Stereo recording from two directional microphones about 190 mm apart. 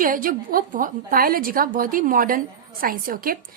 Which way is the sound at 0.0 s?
45° right (ahead or behind).